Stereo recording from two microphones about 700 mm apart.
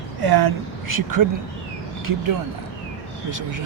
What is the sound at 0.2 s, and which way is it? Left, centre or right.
A woman's voice, right.